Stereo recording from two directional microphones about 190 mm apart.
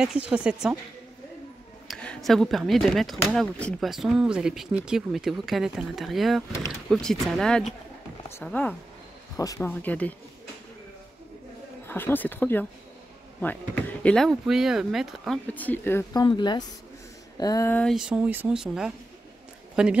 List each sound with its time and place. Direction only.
0.0 s speech: 5° right (ahead or behind)
1.9 s speech: 5° left (ahead or behind); by 9.7 s 20° left (ahead or behind)
9.7 s speech: 10° left (ahead or behind)
11.9 s speech: 10° left (ahead or behind)
17.9 s speech: 5° right (ahead or behind)